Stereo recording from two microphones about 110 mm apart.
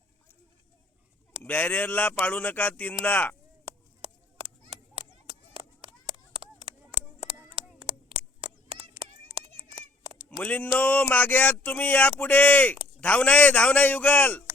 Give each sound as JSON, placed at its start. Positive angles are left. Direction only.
{"t": 1.4, "sound": "speech", "side_deg": 15}
{"t": 4.0, "sound": "chop", "side_deg": -60}
{"t": 6.3, "sound": "a sound", "side_deg": -55}
{"t": 10.4, "sound": "speech", "side_deg": 15}